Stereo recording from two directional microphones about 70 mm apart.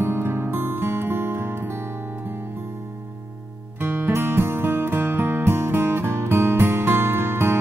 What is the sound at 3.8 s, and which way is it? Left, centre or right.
Music, right.